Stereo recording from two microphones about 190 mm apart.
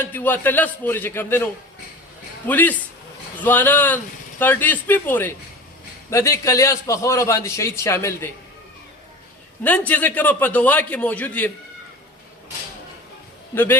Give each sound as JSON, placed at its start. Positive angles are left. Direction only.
{"t": 0.0, "sound": "a man's voice", "side_deg": 10}
{"t": 2.5, "sound": "a man's voice", "side_deg": 10}
{"t": 9.6, "sound": "a man's voice", "side_deg": 10}